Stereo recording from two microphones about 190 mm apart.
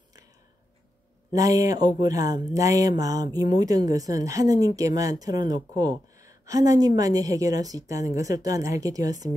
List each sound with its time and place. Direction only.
1.3 s speech: 20° right (ahead or behind)